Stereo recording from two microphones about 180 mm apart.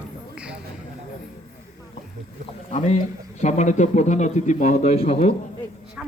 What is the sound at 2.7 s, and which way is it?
A man's voice, 35° left (ahead or behind).